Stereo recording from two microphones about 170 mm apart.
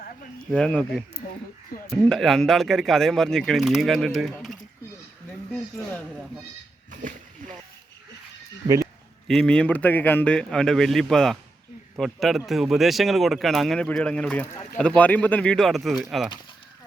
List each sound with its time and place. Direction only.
0.5 s a man's voice: 5° left (ahead or behind)
1.7 s speech: 60° left (ahead or behind)
2.0 s a man's voice: centre (ahead or behind)
8.8 s a man's voice: centre (ahead or behind)